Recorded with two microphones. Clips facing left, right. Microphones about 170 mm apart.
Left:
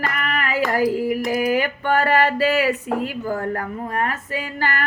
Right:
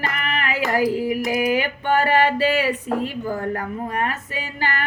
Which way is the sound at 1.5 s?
45° left (ahead or behind).